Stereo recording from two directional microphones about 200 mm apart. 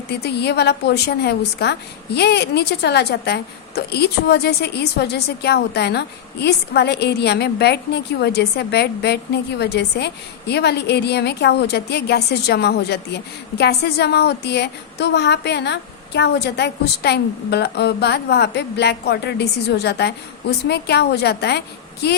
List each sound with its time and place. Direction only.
0.1 s a woman's voice: 55° left (ahead or behind)